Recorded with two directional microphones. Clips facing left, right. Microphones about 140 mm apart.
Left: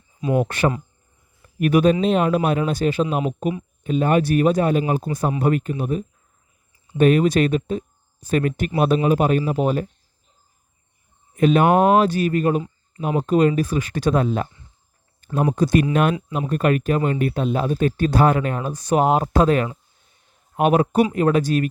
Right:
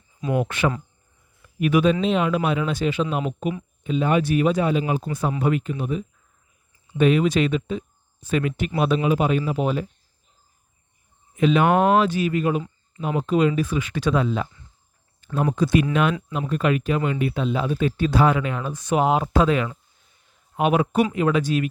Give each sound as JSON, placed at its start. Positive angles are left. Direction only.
{"t": 0.3, "sound": "speech", "side_deg": 40}
{"t": 11.3, "sound": "speech", "side_deg": 45}
{"t": 15.2, "sound": "a sound", "side_deg": 45}
{"t": 15.5, "sound": "speech", "side_deg": 45}